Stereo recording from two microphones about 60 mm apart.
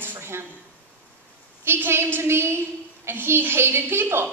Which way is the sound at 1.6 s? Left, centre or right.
Right.